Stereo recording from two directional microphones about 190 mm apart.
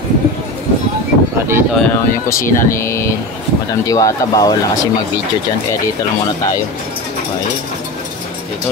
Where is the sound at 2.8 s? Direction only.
15° left (ahead or behind).